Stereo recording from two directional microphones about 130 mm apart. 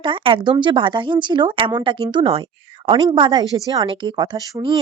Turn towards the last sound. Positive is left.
turn(degrees=-30)  # may be behind; listen again after turning